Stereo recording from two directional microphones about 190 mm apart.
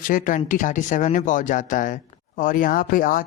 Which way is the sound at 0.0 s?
45° left (ahead or behind).